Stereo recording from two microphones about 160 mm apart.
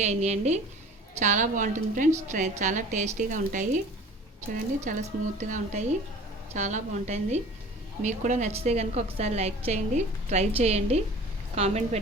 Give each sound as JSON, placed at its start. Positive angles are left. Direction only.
{"t": 0.0, "sound": "a woman's voice", "side_deg": -45}
{"t": 4.9, "sound": "a woman's voice", "side_deg": -50}